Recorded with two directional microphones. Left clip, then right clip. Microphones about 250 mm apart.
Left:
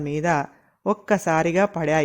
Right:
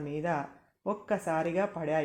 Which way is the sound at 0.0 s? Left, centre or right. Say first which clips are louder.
Left 10 dB; left.